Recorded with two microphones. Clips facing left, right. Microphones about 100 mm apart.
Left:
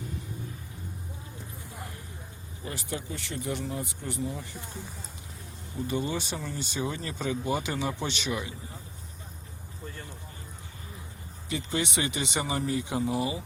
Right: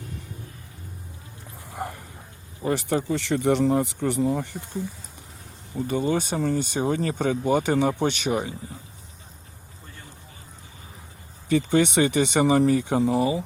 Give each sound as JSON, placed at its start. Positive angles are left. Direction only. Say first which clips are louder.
{"t": 1.7, "sound": "a sound", "louder": "right 12 dB", "side_deg": -60}
{"t": 2.6, "sound": "speech", "louder": "right 12 dB", "side_deg": -80}
{"t": 5.7, "sound": "speech", "louder": "right 7 dB", "side_deg": -60}
{"t": 11.5, "sound": "speech", "louder": "right 11 dB", "side_deg": -60}